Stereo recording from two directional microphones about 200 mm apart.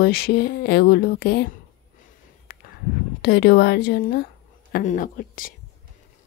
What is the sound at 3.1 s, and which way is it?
Speech, 50° left (ahead or behind).